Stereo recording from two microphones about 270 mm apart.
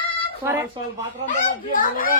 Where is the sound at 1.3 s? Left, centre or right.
Left.